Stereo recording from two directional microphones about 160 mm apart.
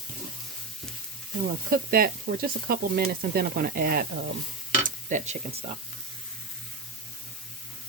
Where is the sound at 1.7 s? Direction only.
70° right (ahead or behind).